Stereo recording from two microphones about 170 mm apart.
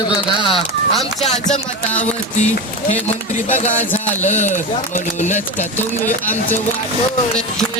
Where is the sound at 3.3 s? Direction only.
40° left (ahead or behind).